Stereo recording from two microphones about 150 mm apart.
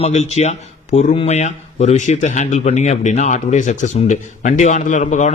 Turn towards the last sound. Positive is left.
turn(degrees=55)  # may be behind; listen again after turning